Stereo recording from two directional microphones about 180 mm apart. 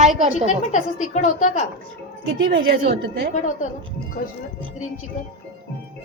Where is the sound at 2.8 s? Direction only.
60° right (ahead or behind).